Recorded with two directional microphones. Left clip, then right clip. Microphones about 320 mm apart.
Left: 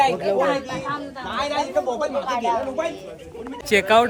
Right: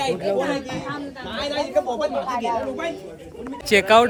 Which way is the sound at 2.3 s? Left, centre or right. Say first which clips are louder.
Left 2 dB; centre.